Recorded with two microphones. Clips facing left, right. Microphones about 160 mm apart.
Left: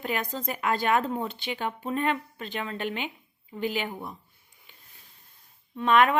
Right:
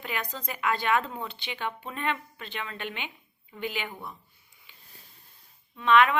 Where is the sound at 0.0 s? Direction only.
45° left (ahead or behind).